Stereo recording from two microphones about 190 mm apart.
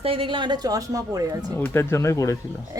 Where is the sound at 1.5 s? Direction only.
10° left (ahead or behind).